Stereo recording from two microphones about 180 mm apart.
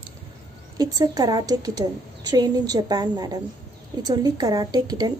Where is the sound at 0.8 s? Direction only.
20° right (ahead or behind).